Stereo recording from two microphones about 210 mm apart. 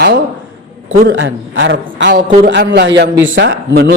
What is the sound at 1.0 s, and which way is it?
A man's voice, 60° right (ahead or behind).